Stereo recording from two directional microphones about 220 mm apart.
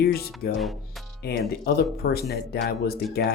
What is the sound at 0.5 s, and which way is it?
Speech, centre (ahead or behind).